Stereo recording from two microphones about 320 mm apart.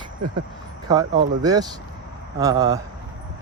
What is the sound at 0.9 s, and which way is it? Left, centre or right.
Speech, centre.